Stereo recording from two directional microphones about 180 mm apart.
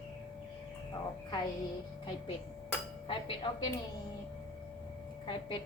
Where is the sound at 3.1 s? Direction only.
25° left (ahead or behind).